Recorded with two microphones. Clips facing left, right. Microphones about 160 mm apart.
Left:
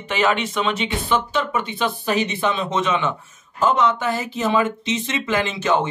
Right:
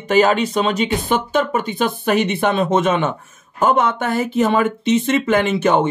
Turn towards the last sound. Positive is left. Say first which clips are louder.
# right 5 dB
turn(degrees=-60)  # may be behind; listen again after turning